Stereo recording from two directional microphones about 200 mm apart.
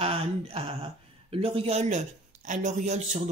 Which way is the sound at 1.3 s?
30° right (ahead or behind).